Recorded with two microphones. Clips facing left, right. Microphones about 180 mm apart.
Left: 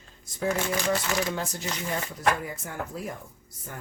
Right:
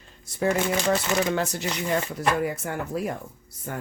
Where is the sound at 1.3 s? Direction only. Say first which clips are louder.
Right 5 dB; 70° right (ahead or behind).